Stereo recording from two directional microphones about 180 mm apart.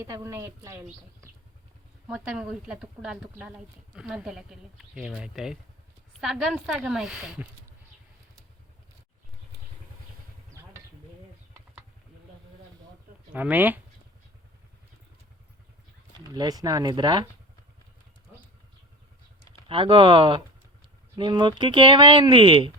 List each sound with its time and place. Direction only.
0.0 s a woman's voice: 15° right (ahead or behind)
2.0 s a woman's voice: 5° right (ahead or behind)
13.3 s a woman's voice: 10° right (ahead or behind)
16.3 s speech: 20° right (ahead or behind)
19.6 s speech: 30° right (ahead or behind)